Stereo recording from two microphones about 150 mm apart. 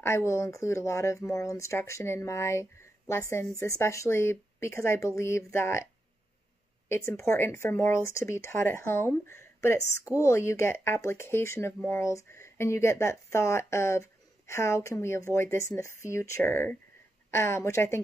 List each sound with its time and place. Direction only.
0.0 s speech: 20° left (ahead or behind)
6.9 s speech: 15° left (ahead or behind)